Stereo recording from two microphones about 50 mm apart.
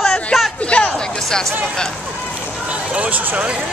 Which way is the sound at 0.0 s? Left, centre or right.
Centre.